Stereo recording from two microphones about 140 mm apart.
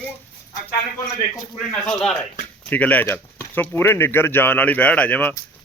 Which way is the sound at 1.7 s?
5° left (ahead or behind).